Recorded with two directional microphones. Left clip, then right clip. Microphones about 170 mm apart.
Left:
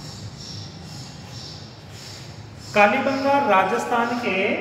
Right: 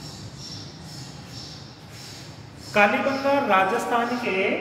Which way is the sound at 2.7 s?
10° right (ahead or behind).